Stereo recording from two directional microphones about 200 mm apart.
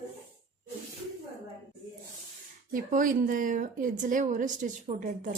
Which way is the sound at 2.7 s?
40° right (ahead or behind).